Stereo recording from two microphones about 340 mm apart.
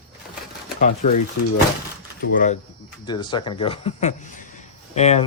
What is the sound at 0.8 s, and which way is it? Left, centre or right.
Speech, left.